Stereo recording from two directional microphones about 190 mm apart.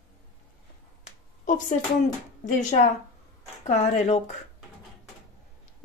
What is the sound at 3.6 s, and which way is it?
Speech, 35° left (ahead or behind).